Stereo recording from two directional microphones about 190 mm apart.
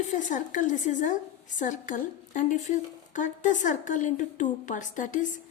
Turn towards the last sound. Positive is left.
turn(degrees=40)  # may be behind; listen again after turning